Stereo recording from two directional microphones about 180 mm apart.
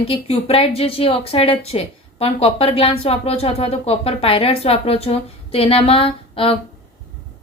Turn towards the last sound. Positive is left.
turn(degrees=30)  # may be behind; listen again after turning